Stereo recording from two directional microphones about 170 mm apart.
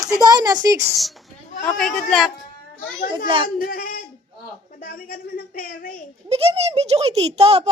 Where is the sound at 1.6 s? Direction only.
5° left (ahead or behind).